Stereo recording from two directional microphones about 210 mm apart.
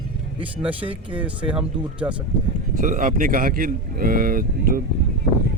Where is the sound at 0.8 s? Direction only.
25° right (ahead or behind).